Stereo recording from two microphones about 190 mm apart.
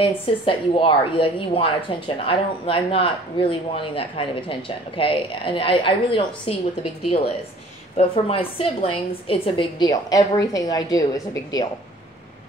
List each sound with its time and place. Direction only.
0.0 s a woman's voice: 25° left (ahead or behind)